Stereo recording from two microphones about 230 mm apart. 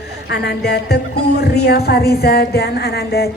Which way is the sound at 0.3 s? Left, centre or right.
Left.